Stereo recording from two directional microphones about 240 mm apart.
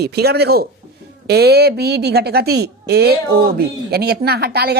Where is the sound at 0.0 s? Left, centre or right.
Right.